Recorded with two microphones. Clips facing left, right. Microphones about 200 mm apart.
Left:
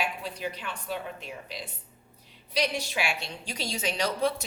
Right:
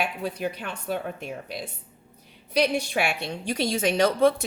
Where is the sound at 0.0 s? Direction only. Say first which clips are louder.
Right 5 dB; 55° right (ahead or behind).